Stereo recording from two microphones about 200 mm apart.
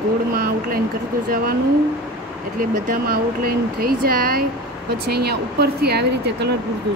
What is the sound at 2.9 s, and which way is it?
Speech, 45° right (ahead or behind).